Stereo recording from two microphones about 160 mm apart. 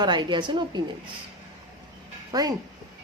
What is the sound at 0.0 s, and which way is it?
Speech, 25° right (ahead or behind).